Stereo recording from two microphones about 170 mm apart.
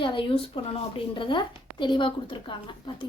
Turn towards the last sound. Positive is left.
turn(degrees=30)  # may be behind; listen again after turning